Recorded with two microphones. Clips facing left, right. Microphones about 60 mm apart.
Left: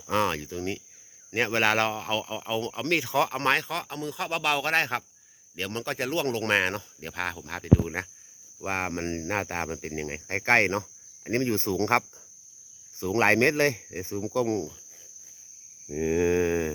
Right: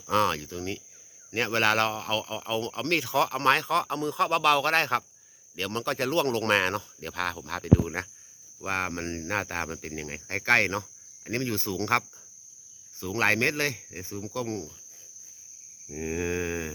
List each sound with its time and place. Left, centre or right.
0.1 s speech: centre
16.1 s speech: left